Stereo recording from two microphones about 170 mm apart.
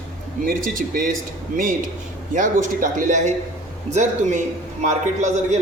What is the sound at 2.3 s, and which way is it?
A man's voice, 50° right (ahead or behind).